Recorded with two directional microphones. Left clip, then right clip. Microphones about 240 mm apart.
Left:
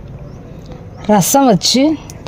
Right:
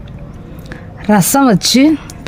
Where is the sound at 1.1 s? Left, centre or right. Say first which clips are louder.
Left 1 dB; centre.